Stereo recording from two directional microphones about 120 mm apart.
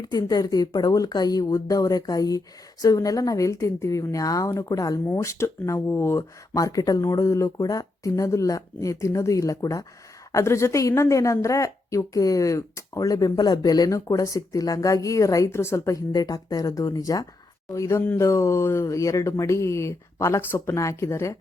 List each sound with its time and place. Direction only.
0.0 s a woman's voice: 30° left (ahead or behind)